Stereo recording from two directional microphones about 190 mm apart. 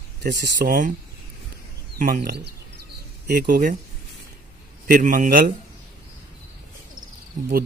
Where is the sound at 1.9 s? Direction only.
45° right (ahead or behind).